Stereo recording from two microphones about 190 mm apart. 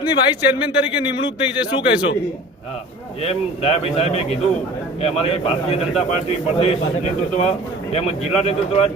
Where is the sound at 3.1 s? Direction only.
30° left (ahead or behind).